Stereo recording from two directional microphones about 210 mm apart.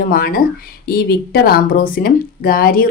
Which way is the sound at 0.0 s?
45° left (ahead or behind).